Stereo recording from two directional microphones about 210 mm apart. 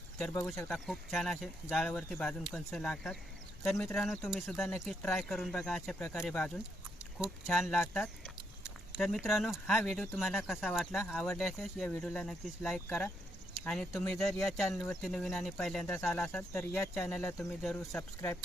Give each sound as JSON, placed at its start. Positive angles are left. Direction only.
{"t": 0.5, "sound": "speech", "side_deg": 10}
{"t": 0.9, "sound": "speech", "side_deg": 0}